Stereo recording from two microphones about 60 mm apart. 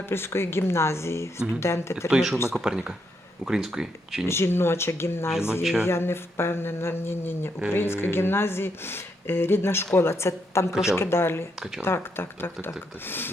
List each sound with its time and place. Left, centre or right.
0.1 s speech: left
2.0 s speech: centre
4.3 s speech: left